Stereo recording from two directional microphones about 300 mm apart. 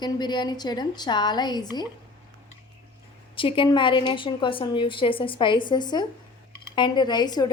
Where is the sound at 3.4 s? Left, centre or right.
Centre.